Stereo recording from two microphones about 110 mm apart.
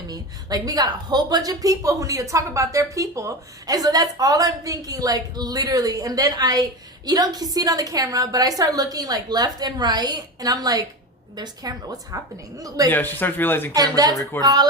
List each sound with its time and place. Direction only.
0.1 s a woman's voice: 35° right (ahead or behind)
12.9 s a man's voice: 15° left (ahead or behind)
13.7 s a woman's voice: 35° right (ahead or behind)